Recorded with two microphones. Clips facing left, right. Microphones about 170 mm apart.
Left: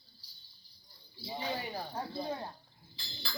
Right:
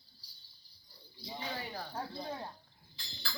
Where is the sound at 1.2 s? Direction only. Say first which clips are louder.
Left 4 dB; 25° left (ahead or behind).